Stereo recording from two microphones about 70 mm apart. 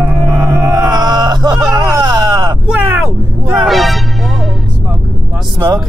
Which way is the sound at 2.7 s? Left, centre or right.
Right.